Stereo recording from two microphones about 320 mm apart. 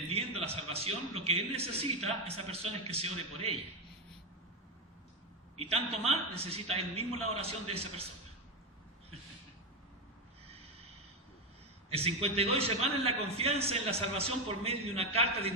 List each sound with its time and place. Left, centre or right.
0.1 s a man's voice: centre
5.5 s a man's voice: centre
10.4 s snort: centre
11.9 s a man's voice: centre